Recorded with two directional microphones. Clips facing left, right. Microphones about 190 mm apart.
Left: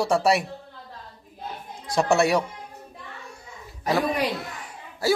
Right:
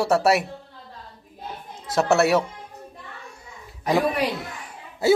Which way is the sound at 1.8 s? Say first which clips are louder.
Right 1 dB; 5° right (ahead or behind).